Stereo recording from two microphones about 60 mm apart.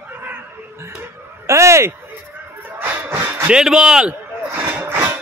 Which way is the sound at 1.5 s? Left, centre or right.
Right.